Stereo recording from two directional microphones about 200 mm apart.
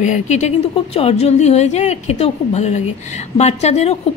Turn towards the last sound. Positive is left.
turn(degrees=35)  # may be behind; listen again after turning